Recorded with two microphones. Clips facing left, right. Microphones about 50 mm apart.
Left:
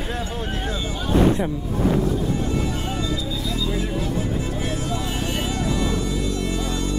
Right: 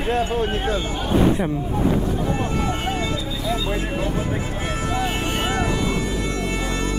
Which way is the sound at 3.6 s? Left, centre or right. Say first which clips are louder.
Right 1 dB; right.